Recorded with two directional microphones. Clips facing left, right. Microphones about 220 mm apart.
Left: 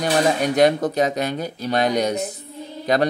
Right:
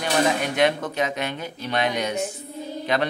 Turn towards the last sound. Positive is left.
turn(degrees=40)  # may be behind; listen again after turning